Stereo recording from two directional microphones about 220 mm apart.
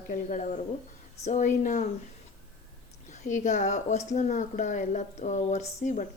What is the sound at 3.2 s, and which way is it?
Speech, 35° left (ahead or behind).